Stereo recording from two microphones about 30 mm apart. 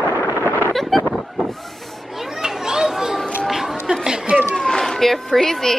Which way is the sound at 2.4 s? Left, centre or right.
Centre.